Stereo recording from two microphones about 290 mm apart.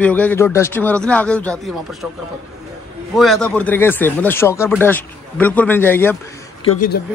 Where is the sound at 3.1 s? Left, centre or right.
Centre.